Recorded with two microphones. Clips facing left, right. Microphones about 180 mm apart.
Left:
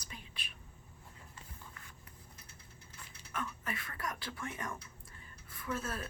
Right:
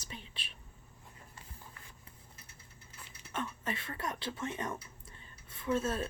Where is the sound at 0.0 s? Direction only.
25° right (ahead or behind).